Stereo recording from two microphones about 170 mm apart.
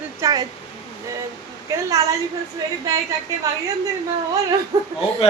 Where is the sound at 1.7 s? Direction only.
20° right (ahead or behind).